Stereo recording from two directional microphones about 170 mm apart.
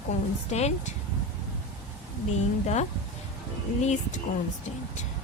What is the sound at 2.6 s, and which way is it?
A woman's voice, 40° left (ahead or behind).